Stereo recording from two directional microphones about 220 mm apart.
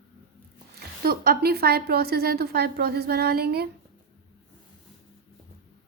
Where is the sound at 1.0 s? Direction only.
45° right (ahead or behind).